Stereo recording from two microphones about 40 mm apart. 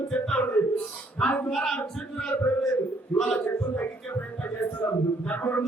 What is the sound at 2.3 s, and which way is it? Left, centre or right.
Speech, left.